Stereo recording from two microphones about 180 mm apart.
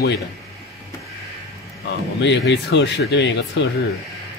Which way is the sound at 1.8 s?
75° left (ahead or behind).